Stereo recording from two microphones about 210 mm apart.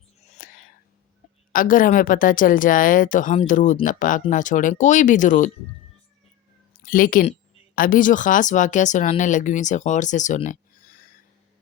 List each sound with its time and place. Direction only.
0.3 s whispering: 40° left (ahead or behind)
1.5 s a woman's voice: 40° left (ahead or behind)
6.7 s a woman's voice: 40° left (ahead or behind)